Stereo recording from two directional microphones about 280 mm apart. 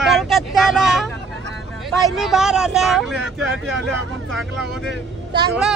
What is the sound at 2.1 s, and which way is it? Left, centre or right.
Speech, centre.